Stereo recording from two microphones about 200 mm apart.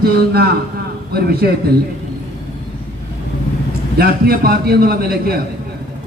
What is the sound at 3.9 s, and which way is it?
Speech, 50° right (ahead or behind).